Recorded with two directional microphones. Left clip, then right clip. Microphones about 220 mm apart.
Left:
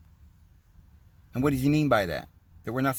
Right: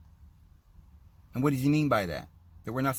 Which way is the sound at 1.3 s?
30° left (ahead or behind).